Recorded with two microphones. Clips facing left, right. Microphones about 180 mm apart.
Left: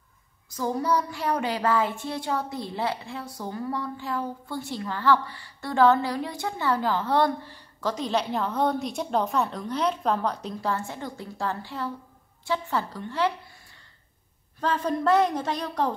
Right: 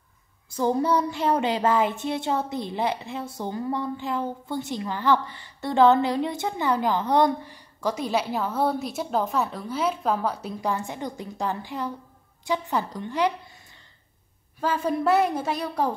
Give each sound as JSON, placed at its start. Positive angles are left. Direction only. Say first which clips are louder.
{"t": 0.5, "sound": "child singing", "louder": "right 3 dB", "side_deg": -30}
{"t": 12.4, "sound": "a woman's voice", "louder": "right 2 dB", "side_deg": -15}
{"t": 14.6, "sound": "a woman's voice", "louder": "right 1 dB", "side_deg": -5}